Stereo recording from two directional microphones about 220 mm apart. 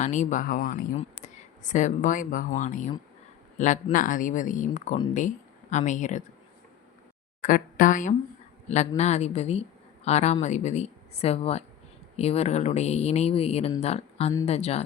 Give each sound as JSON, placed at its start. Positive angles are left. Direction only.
{"t": 0.0, "sound": "speech", "side_deg": 35}
{"t": 7.4, "sound": "speech", "side_deg": 40}